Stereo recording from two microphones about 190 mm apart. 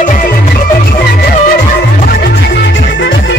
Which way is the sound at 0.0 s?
40° left (ahead or behind).